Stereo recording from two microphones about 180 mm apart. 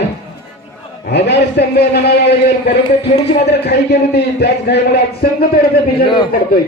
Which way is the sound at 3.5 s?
70° left (ahead or behind).